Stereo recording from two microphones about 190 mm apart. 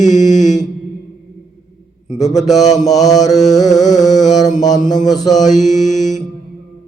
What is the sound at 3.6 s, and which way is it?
Mantra, 40° left (ahead or behind).